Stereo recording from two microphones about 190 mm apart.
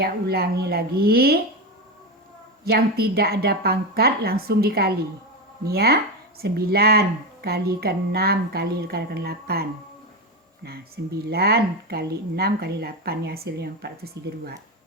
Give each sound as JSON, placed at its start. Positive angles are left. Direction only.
{"t": 0.0, "sound": "speech", "side_deg": -55}
{"t": 2.6, "sound": "speech", "side_deg": -55}